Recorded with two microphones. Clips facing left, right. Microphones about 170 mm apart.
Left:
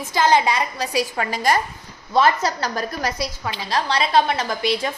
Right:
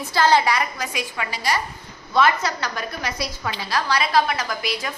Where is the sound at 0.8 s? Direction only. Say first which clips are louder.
Left 6 dB; 40° left (ahead or behind).